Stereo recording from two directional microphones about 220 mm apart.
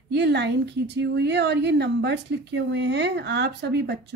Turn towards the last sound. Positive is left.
turn(degrees=-50)  # may be behind; listen again after turning